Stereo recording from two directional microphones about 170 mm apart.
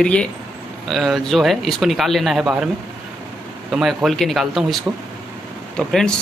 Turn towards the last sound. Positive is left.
turn(degrees=5)  # may be behind; listen again after turning